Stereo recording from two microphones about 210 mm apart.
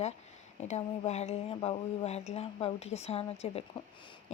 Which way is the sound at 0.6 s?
30° left (ahead or behind).